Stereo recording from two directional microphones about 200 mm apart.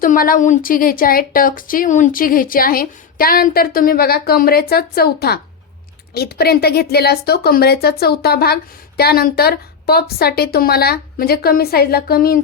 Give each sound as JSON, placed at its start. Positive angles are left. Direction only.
{"t": 0.0, "sound": "a woman's voice", "side_deg": 45}